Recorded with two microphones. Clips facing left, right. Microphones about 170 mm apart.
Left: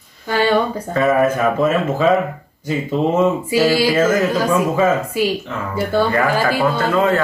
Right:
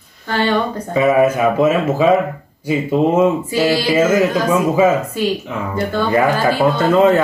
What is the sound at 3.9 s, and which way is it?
Speech, 10° right (ahead or behind).